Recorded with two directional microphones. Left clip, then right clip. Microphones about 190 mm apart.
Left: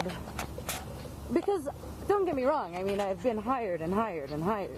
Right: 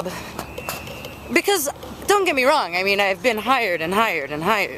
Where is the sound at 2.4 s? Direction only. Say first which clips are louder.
Right 11 dB; 30° right (ahead or behind).